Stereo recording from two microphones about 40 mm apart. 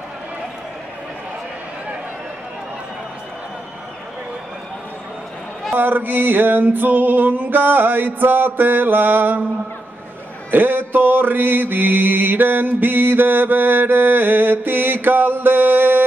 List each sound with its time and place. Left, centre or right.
5.8 s mantra: right
10.5 s mantra: right